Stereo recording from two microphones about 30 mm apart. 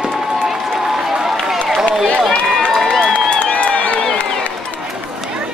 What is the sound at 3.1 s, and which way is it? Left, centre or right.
Crowd, left.